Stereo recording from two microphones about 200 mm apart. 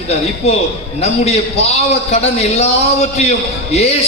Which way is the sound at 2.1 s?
35° left (ahead or behind).